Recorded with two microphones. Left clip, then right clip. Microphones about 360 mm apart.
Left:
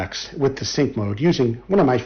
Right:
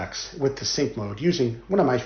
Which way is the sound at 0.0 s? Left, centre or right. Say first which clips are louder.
Left 4 dB; left.